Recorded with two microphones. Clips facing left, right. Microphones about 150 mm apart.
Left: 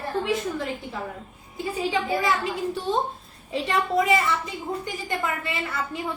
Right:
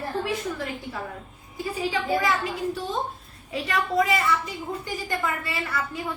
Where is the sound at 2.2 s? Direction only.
25° left (ahead or behind).